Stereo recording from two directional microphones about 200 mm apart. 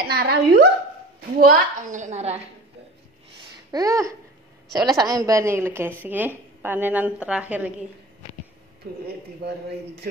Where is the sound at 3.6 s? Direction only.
15° right (ahead or behind).